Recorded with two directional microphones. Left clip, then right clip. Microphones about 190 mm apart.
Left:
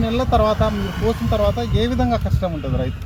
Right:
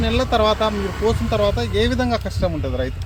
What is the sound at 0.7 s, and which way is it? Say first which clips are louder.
Speech: right 2 dB; 30° left (ahead or behind).